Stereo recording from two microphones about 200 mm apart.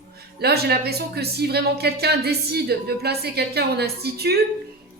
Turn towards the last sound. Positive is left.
turn(degrees=-50)  # may be behind; listen again after turning